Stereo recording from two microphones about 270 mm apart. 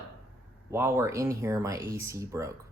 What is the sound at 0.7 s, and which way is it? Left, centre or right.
Speech, centre.